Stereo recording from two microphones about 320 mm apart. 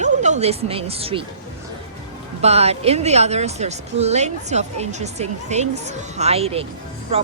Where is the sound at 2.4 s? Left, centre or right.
Centre.